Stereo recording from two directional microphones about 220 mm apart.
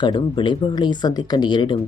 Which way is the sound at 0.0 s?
20° left (ahead or behind).